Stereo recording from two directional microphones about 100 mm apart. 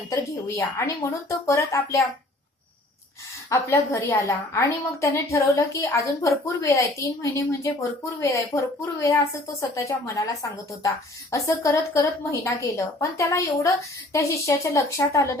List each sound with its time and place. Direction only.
0.1 s a woman's voice: 30° left (ahead or behind)
3.5 s a woman's voice: 25° left (ahead or behind)